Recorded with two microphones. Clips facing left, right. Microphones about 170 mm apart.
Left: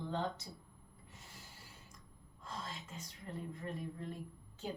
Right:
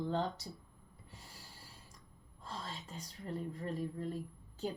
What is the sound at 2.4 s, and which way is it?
A woman's voice, 35° right (ahead or behind).